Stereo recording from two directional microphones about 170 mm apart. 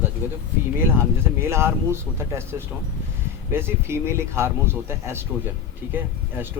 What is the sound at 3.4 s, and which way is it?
Speech, 15° right (ahead or behind).